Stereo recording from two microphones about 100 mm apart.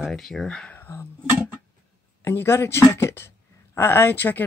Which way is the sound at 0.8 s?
25° left (ahead or behind).